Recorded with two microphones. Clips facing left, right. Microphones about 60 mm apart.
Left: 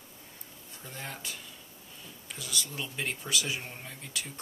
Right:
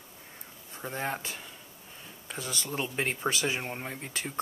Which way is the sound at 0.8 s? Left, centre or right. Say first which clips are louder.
Right 8 dB; right.